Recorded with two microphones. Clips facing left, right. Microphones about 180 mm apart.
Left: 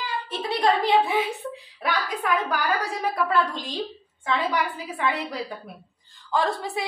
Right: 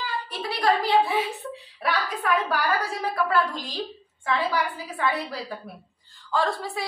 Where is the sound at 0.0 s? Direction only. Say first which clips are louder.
Left 1 dB; 20° left (ahead or behind).